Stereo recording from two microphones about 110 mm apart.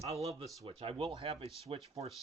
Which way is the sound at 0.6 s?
60° right (ahead or behind).